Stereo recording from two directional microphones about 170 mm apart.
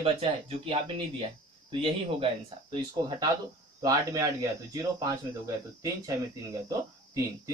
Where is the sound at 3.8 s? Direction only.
20° right (ahead or behind).